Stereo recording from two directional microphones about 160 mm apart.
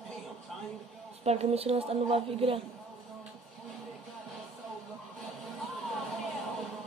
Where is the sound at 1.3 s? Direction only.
40° right (ahead or behind).